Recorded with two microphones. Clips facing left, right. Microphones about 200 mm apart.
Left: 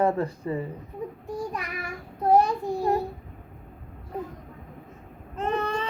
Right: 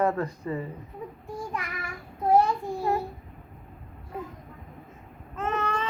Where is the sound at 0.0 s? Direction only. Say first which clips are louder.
Left 2 dB; 30° left (ahead or behind).